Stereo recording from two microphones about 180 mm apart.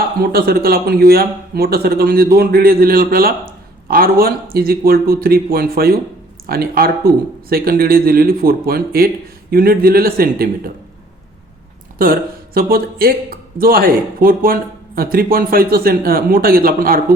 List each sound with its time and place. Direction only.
0.2 s a man's voice: 55° right (ahead or behind)
12.0 s speech: 50° right (ahead or behind)